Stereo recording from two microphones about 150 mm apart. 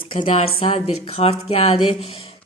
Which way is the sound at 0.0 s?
40° left (ahead or behind).